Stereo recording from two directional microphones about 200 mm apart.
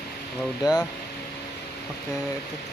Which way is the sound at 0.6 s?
20° left (ahead or behind).